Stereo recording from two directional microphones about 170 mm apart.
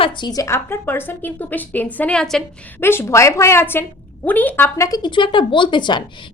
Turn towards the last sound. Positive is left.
turn(degrees=25)  # may be behind; listen again after turning